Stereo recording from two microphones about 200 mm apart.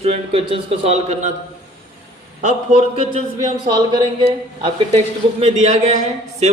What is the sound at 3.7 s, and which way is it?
Speech, 20° right (ahead or behind).